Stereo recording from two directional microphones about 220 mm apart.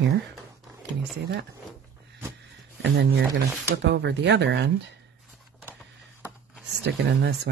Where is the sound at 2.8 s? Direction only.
50° right (ahead or behind).